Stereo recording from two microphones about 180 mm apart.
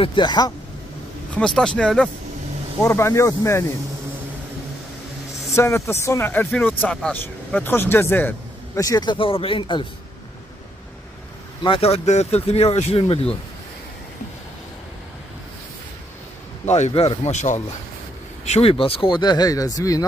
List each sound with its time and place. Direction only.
0.0 s speech: 25° left (ahead or behind)
1.4 s speech: 5° left (ahead or behind)
5.5 s speech: 15° left (ahead or behind)
11.6 s speech: 30° left (ahead or behind)
16.6 s speech: 40° left (ahead or behind); by 20.1 s 20° left (ahead or behind)